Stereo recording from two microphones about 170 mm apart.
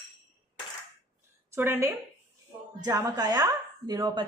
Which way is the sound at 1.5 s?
15° right (ahead or behind).